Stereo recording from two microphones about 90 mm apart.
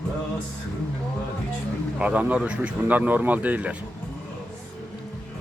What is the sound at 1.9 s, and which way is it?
Speech, 15° right (ahead or behind).